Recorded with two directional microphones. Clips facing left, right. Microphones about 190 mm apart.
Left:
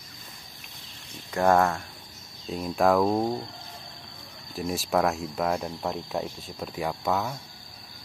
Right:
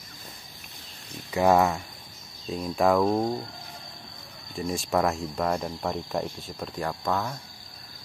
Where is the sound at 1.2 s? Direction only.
10° right (ahead or behind).